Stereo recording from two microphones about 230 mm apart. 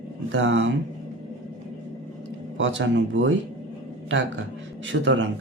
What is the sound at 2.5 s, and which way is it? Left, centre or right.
Speech, right.